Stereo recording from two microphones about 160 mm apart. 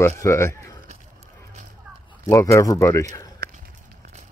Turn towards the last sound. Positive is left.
turn(degrees=-65)  # may be behind; listen again after turning